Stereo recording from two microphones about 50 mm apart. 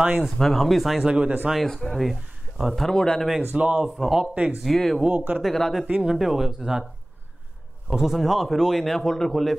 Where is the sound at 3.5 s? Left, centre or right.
Centre.